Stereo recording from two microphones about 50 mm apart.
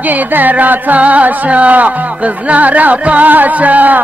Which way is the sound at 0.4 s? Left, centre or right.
Right.